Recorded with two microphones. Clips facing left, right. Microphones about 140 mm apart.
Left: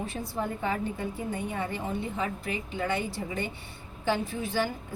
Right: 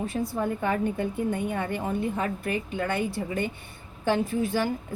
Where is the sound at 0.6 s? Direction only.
55° right (ahead or behind).